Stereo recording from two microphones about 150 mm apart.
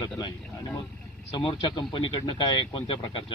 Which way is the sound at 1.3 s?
30° left (ahead or behind).